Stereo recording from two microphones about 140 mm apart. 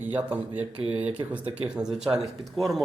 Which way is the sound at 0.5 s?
45° right (ahead or behind).